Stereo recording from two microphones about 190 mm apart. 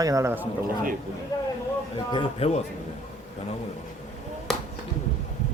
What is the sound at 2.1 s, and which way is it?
Speech, 30° left (ahead or behind).